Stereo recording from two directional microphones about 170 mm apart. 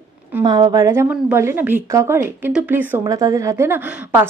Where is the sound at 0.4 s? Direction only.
25° right (ahead or behind).